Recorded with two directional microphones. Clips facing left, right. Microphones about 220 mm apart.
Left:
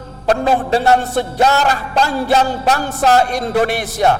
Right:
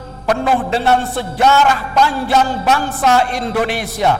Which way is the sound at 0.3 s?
30° left (ahead or behind).